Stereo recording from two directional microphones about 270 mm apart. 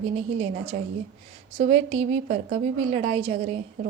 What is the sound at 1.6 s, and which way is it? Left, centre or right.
Speech, right.